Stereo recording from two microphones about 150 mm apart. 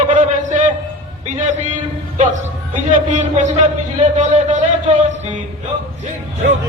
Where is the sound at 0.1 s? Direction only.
55° right (ahead or behind).